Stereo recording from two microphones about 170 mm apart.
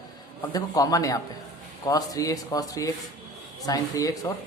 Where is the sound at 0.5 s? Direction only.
20° left (ahead or behind).